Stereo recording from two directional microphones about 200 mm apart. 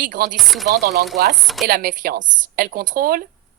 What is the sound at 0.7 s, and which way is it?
A woman's voice, 50° right (ahead or behind).